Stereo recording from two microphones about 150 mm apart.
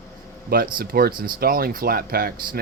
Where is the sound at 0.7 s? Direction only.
90° right.